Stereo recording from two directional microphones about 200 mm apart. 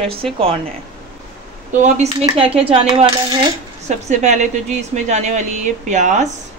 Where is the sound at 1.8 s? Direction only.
35° right (ahead or behind).